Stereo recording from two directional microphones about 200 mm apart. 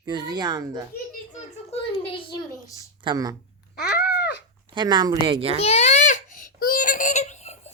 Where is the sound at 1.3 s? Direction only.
35° left (ahead or behind).